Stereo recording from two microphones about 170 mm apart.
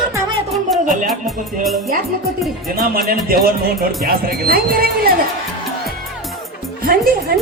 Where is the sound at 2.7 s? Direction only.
60° right (ahead or behind).